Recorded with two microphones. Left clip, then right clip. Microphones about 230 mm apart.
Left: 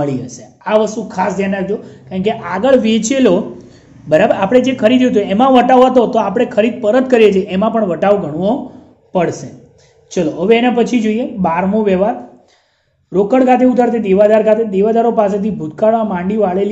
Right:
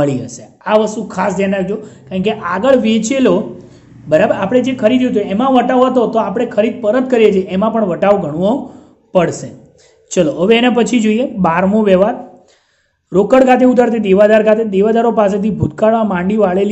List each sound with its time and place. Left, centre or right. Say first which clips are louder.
0.0 s a man's voice: right 3 dB; centre